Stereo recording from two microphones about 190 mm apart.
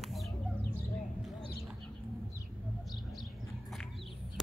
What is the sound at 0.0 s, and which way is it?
Chicken, centre (ahead or behind).